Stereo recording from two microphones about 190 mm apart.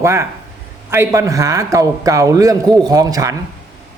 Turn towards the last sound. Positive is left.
turn(degrees=-20)  # may be behind; listen again after turning